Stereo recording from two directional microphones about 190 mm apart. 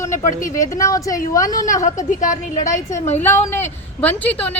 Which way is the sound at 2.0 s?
40° left (ahead or behind).